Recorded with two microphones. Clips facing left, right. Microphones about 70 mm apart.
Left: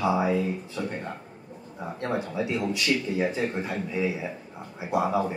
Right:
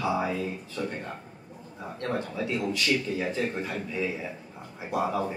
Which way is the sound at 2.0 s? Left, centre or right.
Centre.